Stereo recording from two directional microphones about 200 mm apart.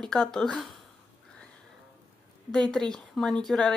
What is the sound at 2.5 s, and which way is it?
Speech, 5° left (ahead or behind).